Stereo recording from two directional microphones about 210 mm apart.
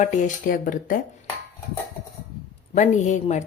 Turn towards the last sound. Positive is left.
turn(degrees=35)  # may be behind; listen again after turning